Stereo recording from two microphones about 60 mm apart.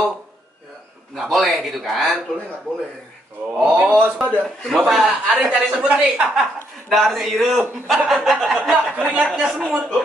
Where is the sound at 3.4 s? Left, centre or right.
Right.